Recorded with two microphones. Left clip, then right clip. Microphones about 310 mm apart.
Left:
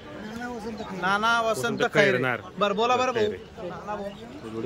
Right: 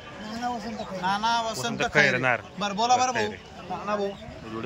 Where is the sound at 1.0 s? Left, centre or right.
Centre.